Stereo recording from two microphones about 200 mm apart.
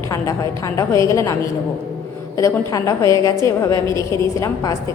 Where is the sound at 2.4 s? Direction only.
15° left (ahead or behind).